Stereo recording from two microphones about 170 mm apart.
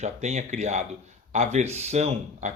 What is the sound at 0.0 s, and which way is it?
Speech, 40° right (ahead or behind).